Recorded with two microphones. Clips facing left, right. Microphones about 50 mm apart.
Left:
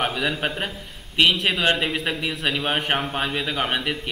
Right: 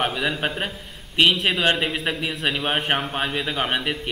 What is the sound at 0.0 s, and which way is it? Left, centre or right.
A man's voice, centre.